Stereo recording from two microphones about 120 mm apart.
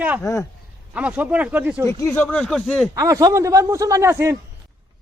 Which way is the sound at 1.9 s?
20° left (ahead or behind).